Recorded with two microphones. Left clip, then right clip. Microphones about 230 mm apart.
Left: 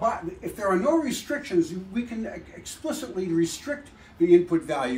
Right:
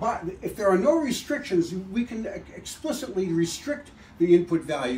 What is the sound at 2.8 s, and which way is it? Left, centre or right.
Speech, centre.